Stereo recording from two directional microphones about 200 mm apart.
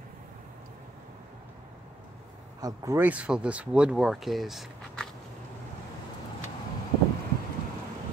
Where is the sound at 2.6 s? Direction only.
15° right (ahead or behind).